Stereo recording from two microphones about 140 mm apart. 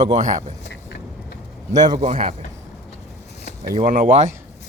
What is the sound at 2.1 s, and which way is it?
Speech, 45° right (ahead or behind).